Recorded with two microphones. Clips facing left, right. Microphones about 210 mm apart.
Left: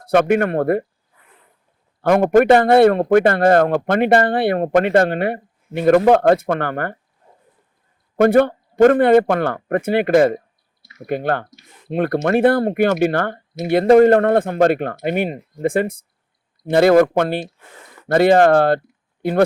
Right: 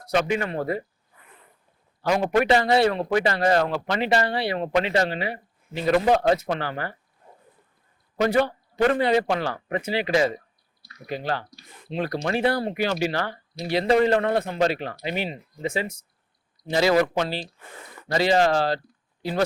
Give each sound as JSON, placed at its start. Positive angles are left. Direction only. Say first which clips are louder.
{"t": 0.1, "sound": "speech", "louder": "left 9 dB", "side_deg": 55}
{"t": 2.0, "sound": "a man's voice", "louder": "left 8 dB", "side_deg": 55}
{"t": 8.1, "sound": "a man's voice", "louder": "left 8 dB", "side_deg": 55}